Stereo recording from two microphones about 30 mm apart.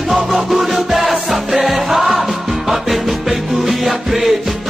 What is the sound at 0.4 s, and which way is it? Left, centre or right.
Music, centre.